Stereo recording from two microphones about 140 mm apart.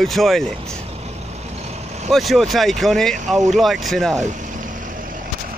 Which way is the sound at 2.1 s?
Centre (ahead or behind).